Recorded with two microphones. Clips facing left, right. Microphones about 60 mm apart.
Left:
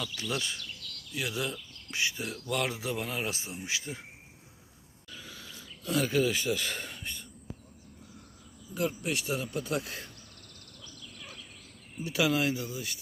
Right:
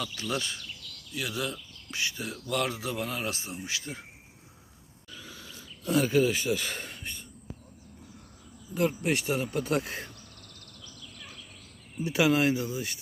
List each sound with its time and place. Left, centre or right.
0.2 s speech: centre
5.8 s speech: centre
8.7 s speech: right
9.8 s speech: right
12.0 s speech: right